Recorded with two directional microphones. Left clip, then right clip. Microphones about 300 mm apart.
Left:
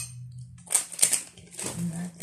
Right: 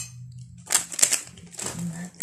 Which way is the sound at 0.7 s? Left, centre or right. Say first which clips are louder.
Right 4 dB; centre.